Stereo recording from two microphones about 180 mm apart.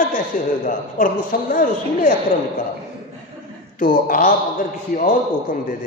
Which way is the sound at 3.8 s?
50° left (ahead or behind).